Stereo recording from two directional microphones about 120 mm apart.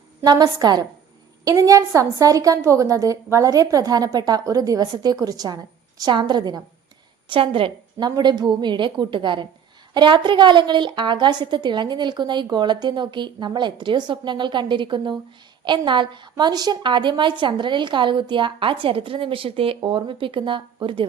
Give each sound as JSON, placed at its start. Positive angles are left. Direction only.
{"t": 0.3, "sound": "a woman's voice", "side_deg": -35}